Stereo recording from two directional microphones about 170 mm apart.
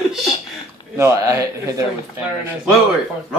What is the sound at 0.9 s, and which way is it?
Speech, 15° right (ahead or behind).